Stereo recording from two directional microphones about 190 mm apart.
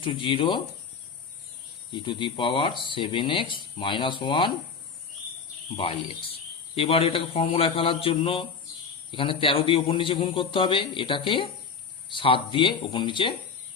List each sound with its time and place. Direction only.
0.0 s speech: 25° left (ahead or behind)
1.9 s speech: 25° left (ahead or behind)
5.7 s speech: 25° left (ahead or behind)